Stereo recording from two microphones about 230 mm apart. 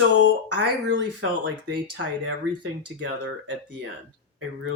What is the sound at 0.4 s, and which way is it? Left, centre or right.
Speech, right.